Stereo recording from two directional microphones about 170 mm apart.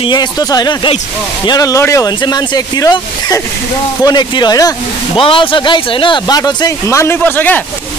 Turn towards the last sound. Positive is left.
turn(degrees=10)  # may be behind; listen again after turning